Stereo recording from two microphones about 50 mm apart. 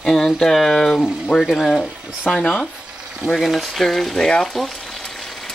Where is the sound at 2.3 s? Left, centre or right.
Centre.